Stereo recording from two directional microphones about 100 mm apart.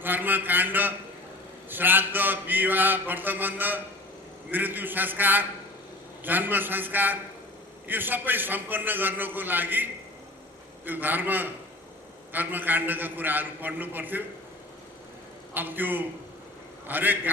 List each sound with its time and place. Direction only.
0.0 s a man's voice: 20° right (ahead or behind)
15.5 s a man's voice: 20° right (ahead or behind)